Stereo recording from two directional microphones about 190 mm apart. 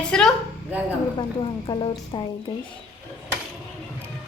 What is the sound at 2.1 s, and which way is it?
Speech, 25° left (ahead or behind).